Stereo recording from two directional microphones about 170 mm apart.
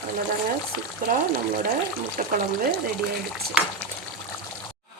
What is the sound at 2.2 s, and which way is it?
Frying, 50° right (ahead or behind).